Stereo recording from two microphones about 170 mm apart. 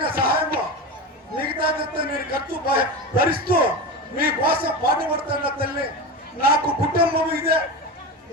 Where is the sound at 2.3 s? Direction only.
60° right (ahead or behind).